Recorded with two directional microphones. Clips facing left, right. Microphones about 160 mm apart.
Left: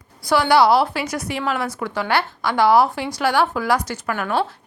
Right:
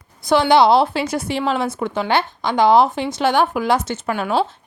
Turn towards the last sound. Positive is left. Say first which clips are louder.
# right 2 dB
turn(degrees=-20)  # may be behind; listen again after turning